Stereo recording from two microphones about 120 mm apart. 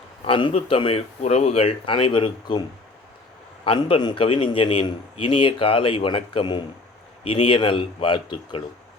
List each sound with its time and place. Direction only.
0.3 s a man's voice: 45° left (ahead or behind)